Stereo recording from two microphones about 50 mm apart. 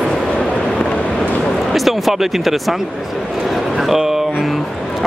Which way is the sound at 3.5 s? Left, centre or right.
Centre.